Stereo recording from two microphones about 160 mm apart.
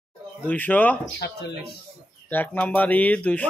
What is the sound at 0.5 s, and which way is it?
Speech, 10° left (ahead or behind).